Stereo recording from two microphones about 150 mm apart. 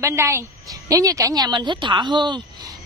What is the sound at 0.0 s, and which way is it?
A woman's voice, 20° right (ahead or behind).